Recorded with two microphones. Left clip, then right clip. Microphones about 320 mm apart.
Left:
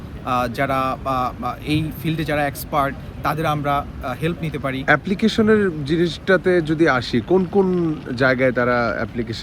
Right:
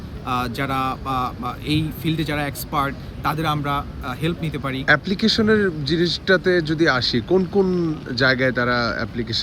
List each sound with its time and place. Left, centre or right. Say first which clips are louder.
0.3 s speech: left 3 dB; centre
7.3 s speech: left 3 dB; left
8.1 s speech: left 1 dB; centre